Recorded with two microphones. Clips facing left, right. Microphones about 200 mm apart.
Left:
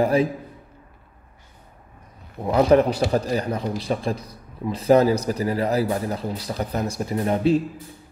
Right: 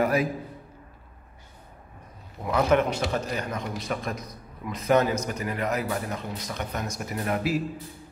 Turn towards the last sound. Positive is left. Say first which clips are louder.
# left 7 dB
turn(degrees=25)  # may be behind; listen again after turning